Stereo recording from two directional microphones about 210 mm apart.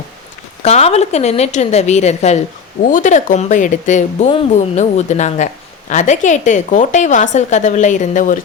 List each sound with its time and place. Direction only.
0.6 s speech: 30° left (ahead or behind)